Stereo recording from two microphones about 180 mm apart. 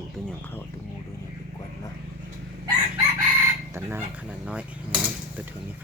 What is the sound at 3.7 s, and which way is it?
Speech, 10° right (ahead or behind).